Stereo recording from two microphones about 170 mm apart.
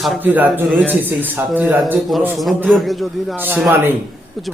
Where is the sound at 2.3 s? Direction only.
Centre (ahead or behind).